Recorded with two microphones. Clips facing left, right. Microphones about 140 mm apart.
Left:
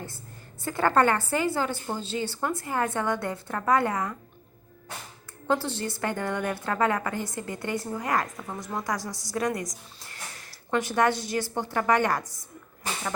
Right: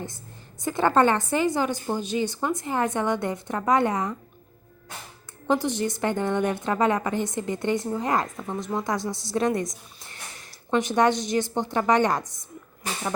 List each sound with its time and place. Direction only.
0.6 s a woman's voice: 20° right (ahead or behind)
5.5 s a woman's voice: 15° right (ahead or behind)